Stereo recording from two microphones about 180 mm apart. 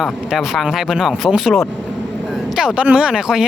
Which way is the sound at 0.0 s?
Centre (ahead or behind).